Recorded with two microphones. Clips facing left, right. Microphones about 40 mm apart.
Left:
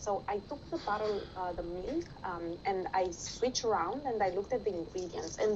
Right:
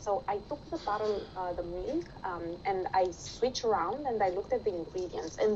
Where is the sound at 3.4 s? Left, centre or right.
Centre.